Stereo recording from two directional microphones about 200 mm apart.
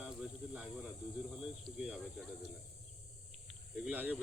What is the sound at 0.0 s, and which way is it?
Snake, 5° right (ahead or behind).